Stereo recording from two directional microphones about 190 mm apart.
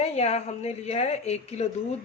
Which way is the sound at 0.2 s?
35° left (ahead or behind).